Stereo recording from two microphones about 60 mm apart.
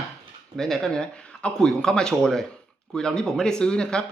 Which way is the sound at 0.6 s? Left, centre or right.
Centre.